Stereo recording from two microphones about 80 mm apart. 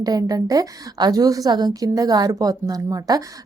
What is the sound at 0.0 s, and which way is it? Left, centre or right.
A woman's voice, right.